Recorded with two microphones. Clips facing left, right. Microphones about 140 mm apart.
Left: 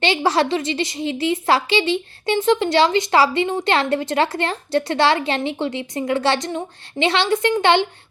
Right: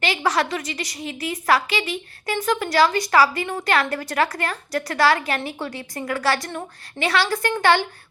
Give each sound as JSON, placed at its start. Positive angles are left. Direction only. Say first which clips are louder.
{"t": 0.0, "sound": "a woman's voice", "louder": "left 4 dB", "side_deg": 25}